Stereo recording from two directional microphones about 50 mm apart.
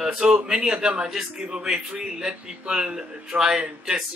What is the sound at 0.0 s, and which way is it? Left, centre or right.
A man's voice, centre.